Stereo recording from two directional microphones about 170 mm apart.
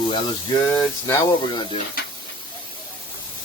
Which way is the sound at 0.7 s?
20° left (ahead or behind).